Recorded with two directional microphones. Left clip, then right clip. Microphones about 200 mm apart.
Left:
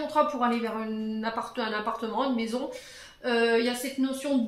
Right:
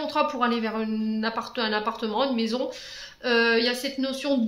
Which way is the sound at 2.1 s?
35° right (ahead or behind).